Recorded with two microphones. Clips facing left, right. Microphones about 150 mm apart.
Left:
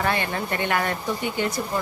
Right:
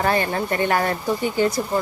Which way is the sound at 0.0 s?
40° right (ahead or behind).